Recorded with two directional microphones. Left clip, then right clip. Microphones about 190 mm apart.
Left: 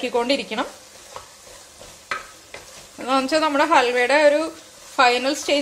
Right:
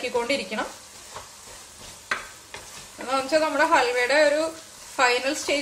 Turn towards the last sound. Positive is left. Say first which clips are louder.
# left 4 dB
turn(degrees=40)  # may be behind; listen again after turning